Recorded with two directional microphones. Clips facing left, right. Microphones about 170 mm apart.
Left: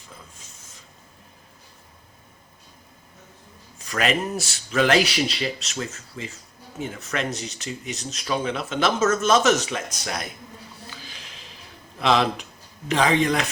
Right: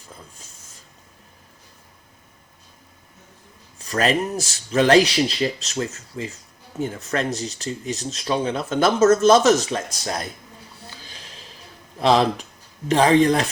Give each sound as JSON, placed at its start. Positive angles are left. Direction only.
{"t": 3.8, "sound": "speech", "side_deg": -35}
{"t": 11.9, "sound": "speech", "side_deg": -35}